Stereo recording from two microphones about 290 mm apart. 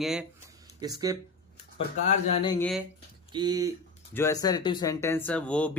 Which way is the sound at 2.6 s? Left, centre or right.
Centre.